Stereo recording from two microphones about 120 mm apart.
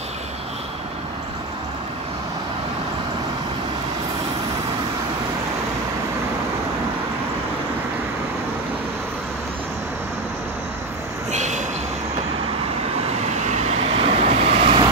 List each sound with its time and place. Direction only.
11.3 s vehicle: 80° right
13.5 s vehicle: 65° right (ahead or behind); by 14.8 s 50° right (ahead or behind)